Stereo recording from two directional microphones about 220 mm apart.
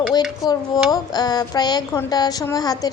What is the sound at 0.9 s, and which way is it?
A woman's voice, 15° left (ahead or behind).